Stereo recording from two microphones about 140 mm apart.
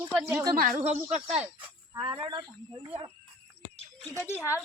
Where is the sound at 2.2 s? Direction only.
35° right (ahead or behind).